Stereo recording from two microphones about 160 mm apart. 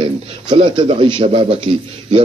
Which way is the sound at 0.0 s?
35° right (ahead or behind).